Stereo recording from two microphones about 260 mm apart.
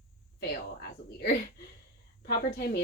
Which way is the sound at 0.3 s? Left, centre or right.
Left.